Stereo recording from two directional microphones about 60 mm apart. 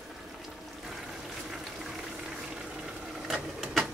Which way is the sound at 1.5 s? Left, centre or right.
Centre.